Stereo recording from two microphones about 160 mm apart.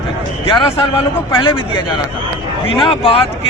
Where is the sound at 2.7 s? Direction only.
35° left (ahead or behind).